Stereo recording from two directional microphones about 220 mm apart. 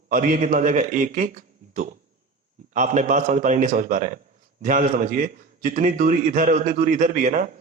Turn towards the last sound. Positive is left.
turn(degrees=-35)  # may be behind; listen again after turning